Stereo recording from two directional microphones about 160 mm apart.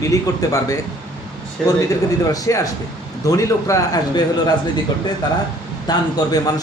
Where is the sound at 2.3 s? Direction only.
20° left (ahead or behind).